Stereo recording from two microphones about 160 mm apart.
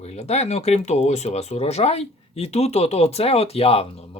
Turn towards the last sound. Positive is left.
turn(degrees=40)  # may be behind; listen again after turning